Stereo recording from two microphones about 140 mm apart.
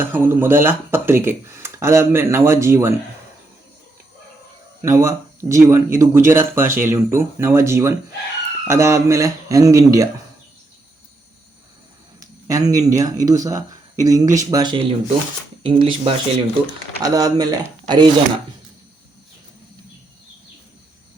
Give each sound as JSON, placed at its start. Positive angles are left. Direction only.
{"t": 0.0, "sound": "speech", "side_deg": -15}
{"t": 4.8, "sound": "speech", "side_deg": -20}
{"t": 12.2, "sound": "speech", "side_deg": -25}
{"t": 17.0, "sound": "speech", "side_deg": -25}